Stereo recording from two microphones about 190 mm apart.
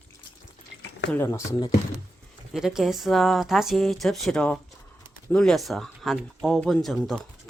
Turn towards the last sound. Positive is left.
turn(degrees=0)  # may be behind; listen again after turning